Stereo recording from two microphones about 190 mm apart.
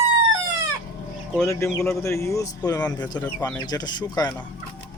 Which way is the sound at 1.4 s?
15° left (ahead or behind).